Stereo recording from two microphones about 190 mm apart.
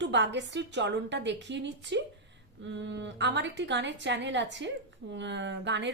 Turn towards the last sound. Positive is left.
turn(degrees=-70)  # may be behind; listen again after turning